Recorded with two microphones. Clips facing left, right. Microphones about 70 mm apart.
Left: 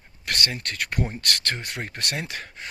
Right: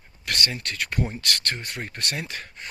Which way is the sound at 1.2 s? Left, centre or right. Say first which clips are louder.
Left 1 dB; left.